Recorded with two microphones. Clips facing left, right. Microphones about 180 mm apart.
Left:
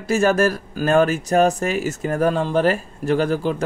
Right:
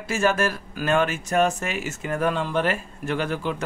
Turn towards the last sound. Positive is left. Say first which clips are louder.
# left 7 dB
turn(degrees=35)  # may be behind; listen again after turning